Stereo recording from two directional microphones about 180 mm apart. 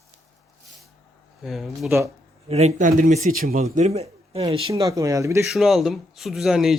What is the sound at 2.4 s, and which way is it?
A man's voice, 35° right (ahead or behind).